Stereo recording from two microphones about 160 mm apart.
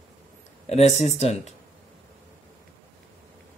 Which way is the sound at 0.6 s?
45° left (ahead or behind).